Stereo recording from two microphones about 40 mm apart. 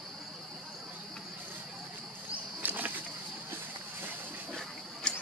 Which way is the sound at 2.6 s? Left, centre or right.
Right.